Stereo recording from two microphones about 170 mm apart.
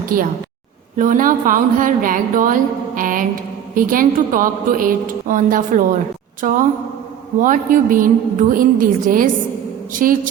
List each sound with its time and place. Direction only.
0.1 s a woman's voice: 55° right (ahead or behind)